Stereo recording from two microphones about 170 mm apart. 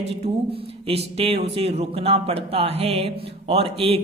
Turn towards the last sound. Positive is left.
turn(degrees=-35)  # may be behind; listen again after turning